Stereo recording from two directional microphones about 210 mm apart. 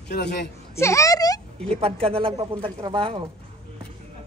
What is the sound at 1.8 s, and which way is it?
Speech, 25° right (ahead or behind).